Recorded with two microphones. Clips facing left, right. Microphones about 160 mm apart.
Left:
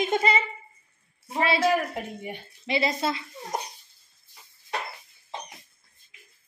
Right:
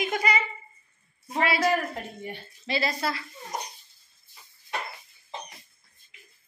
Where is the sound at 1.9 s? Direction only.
15° left (ahead or behind).